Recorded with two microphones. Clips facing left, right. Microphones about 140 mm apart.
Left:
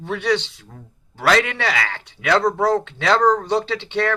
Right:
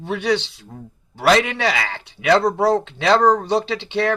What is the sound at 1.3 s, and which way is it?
Speech, 20° right (ahead or behind).